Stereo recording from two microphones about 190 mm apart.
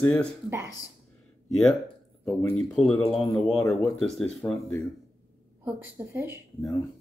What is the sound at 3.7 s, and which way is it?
Speech, 5° left (ahead or behind).